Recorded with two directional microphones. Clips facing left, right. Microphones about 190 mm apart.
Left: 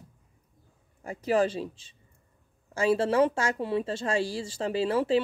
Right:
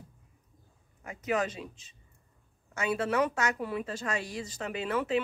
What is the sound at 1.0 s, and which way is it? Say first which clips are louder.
Speech: left 6 dB; 30° left (ahead or behind).